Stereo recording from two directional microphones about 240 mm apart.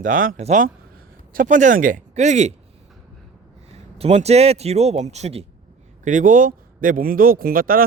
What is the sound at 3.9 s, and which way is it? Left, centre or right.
A man's voice, right.